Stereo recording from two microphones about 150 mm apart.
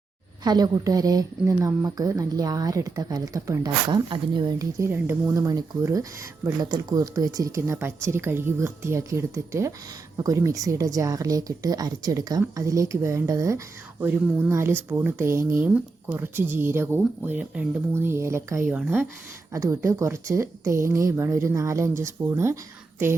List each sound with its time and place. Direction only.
0.4 s speech: 25° right (ahead or behind)